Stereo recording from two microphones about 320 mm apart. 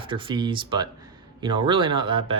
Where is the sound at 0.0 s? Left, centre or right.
Centre.